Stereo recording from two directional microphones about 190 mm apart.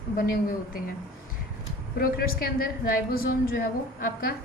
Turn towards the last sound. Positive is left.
turn(degrees=50)  # may be behind; listen again after turning